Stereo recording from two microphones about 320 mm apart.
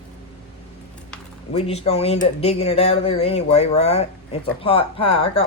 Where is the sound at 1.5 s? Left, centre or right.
Centre.